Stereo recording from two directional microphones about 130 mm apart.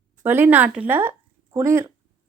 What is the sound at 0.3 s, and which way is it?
Speech, 15° right (ahead or behind).